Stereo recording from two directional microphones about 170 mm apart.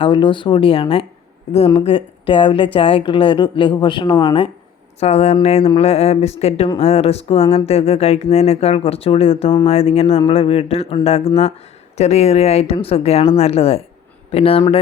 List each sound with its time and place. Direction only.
0.0 s speech: 30° left (ahead or behind)
4.9 s speech: 40° left (ahead or behind)